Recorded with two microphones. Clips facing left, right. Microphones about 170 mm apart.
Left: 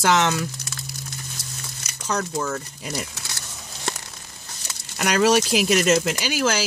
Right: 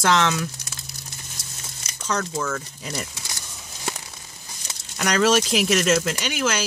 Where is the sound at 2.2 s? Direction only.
30° left (ahead or behind).